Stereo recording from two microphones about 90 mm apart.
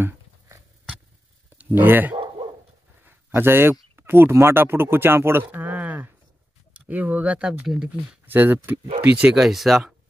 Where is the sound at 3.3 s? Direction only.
25° right (ahead or behind); by 7.9 s 5° right (ahead or behind).